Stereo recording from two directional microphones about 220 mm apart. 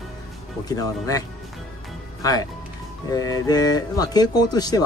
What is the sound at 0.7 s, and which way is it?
Speech, 15° left (ahead or behind).